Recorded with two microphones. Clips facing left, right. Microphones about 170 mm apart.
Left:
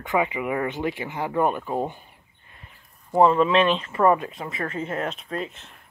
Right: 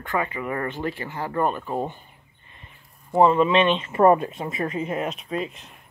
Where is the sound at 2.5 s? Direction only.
Centre (ahead or behind).